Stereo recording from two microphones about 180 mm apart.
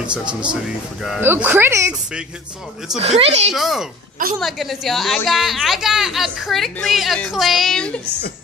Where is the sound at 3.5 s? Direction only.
Centre (ahead or behind).